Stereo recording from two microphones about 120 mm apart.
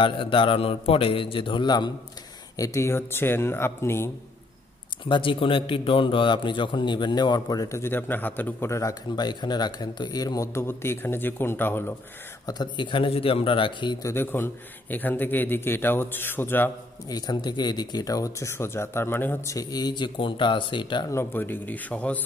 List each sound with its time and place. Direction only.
0.0 s a man's voice: 45° left (ahead or behind)
2.5 s speech: 25° left (ahead or behind)
5.0 s a man's voice: 45° left (ahead or behind); by 11.9 s 20° left (ahead or behind)
12.4 s a man's voice: 40° left (ahead or behind)
14.0 s a man's voice: 20° left (ahead or behind)
17.1 s speech: 35° left (ahead or behind); by 19.5 s 15° left (ahead or behind)
19.5 s a man's voice: 30° left (ahead or behind)
21.1 s a man's voice: 20° left (ahead or behind)